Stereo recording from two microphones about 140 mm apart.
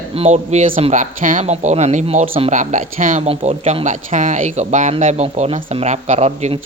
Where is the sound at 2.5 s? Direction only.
60° right (ahead or behind).